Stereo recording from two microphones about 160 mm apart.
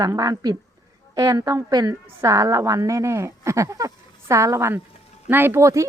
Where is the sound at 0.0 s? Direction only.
25° right (ahead or behind).